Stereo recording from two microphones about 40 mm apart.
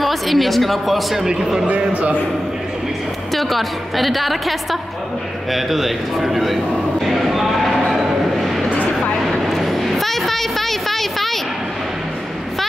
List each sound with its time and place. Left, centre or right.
0.0 s speech: centre
1.2 s a man's voice: centre
3.3 s a woman's voice: centre
7.8 s vehicle: centre